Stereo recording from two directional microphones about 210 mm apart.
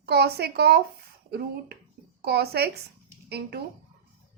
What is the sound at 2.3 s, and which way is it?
A woman's voice, 50° right (ahead or behind).